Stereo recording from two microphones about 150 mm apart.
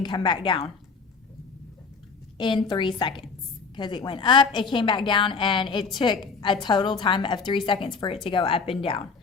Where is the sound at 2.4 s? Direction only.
30° left (ahead or behind).